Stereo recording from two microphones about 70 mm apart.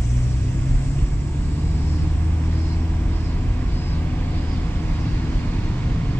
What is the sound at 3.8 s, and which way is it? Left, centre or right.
Vehicle, left.